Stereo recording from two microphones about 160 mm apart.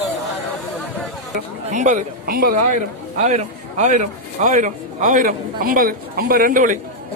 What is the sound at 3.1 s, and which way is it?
A man's voice, 45° right (ahead or behind).